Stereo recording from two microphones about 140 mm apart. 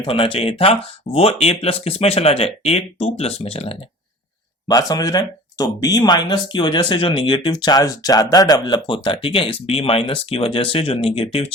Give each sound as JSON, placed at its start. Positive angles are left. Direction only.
{"t": 0.0, "sound": "speech", "side_deg": 40}
{"t": 4.7, "sound": "speech", "side_deg": 25}